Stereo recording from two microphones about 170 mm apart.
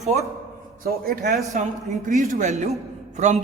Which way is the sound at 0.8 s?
60° right (ahead or behind).